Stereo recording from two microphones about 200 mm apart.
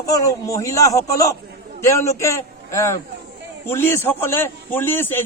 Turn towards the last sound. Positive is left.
turn(degrees=10)  # may be behind; listen again after turning